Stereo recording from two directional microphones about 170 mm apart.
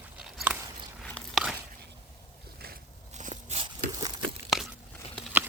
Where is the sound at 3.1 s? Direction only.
40° right (ahead or behind).